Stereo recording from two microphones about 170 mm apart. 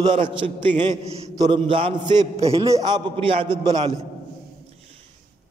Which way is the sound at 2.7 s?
25° right (ahead or behind).